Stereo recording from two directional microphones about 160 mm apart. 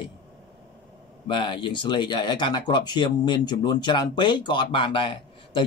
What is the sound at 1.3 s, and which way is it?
Speech, 30° left (ahead or behind).